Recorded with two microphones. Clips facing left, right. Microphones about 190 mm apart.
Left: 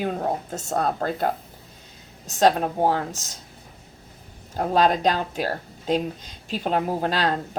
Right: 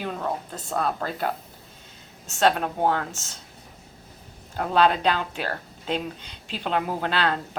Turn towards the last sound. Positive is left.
turn(degrees=40)  # may be behind; listen again after turning